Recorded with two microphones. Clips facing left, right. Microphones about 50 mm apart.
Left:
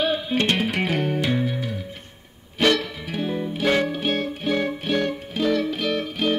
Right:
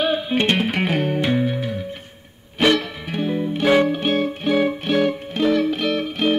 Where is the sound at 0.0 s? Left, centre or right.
Centre.